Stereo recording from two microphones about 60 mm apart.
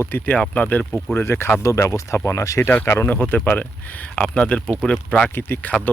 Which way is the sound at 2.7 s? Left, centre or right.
Left.